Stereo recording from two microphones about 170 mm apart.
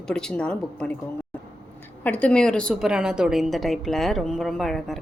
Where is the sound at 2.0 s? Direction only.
10° left (ahead or behind).